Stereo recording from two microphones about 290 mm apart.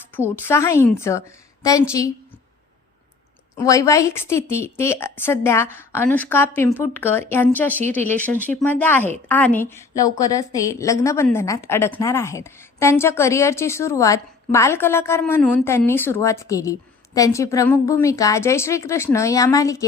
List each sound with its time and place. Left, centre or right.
0.4 s a woman's voice: centre
3.5 s a woman's voice: centre